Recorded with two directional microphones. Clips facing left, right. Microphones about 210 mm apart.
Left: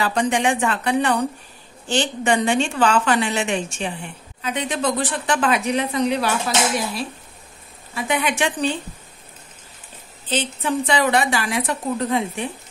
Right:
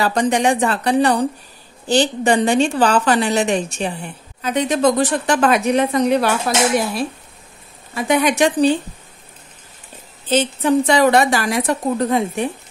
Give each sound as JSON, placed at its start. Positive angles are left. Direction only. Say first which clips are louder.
{"t": 0.0, "sound": "a woman's voice", "louder": "right 3 dB", "side_deg": -40}
{"t": 7.9, "sound": "a woman's voice", "louder": "right 6 dB", "side_deg": -40}
{"t": 10.3, "sound": "a woman's voice", "louder": "right 7 dB", "side_deg": -45}